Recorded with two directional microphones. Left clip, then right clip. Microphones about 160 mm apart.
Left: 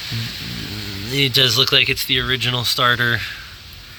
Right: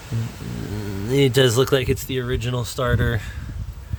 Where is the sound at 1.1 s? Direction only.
45° right (ahead or behind).